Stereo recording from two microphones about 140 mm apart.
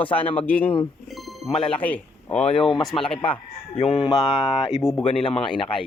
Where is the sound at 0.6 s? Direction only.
40° left (ahead or behind).